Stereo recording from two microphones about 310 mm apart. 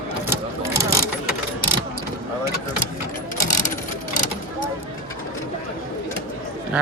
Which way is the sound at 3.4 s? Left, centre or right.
Left.